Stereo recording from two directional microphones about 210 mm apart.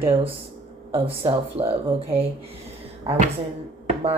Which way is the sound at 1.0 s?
25° right (ahead or behind).